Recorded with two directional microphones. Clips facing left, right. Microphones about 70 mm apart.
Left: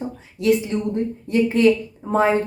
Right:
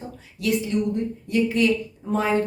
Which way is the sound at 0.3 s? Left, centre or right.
Left.